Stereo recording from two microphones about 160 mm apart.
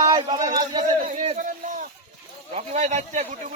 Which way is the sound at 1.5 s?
55° right (ahead or behind).